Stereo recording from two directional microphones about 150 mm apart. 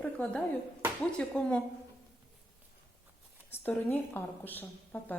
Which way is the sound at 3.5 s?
15° left (ahead or behind).